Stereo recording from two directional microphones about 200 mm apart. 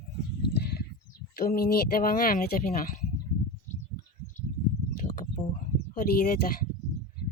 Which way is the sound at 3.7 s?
40° left (ahead or behind).